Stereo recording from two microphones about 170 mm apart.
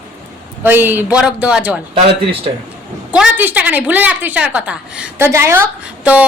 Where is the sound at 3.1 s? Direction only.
10° right (ahead or behind).